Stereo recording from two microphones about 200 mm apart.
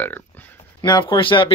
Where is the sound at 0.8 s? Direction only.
20° left (ahead or behind).